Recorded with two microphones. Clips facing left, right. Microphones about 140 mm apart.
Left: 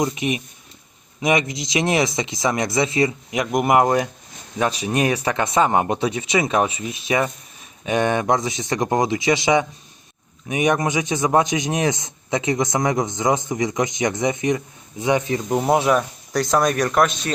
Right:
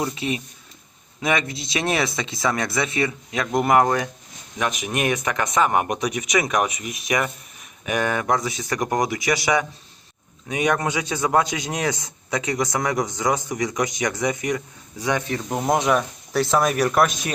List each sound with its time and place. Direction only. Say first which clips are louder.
0.0 s speech: left 3 dB; 15° left (ahead or behind)
4.5 s speech: left 4 dB; 35° left (ahead or behind); by 15.5 s 15° left (ahead or behind)
15.5 s speech: left 2 dB; 5° left (ahead or behind)